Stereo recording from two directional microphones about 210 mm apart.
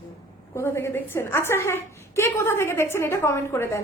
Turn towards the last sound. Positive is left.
turn(degrees=10)  # may be behind; listen again after turning